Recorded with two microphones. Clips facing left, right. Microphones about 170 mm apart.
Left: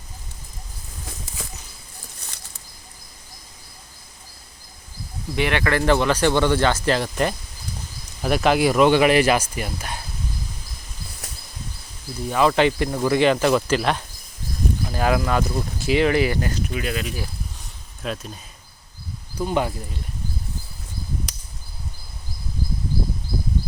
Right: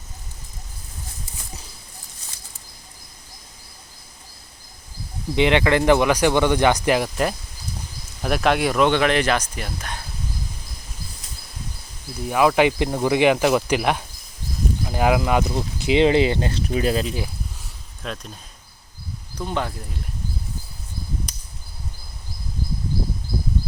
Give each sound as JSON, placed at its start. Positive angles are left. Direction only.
{"t": 2.2, "sound": "a sound", "side_deg": 65}
{"t": 5.3, "sound": "speech", "side_deg": -20}
{"t": 8.2, "sound": "speech", "side_deg": 0}
{"t": 12.3, "sound": "speech", "side_deg": -10}
{"t": 18.0, "sound": "speech", "side_deg": 5}
{"t": 19.4, "sound": "speech", "side_deg": 10}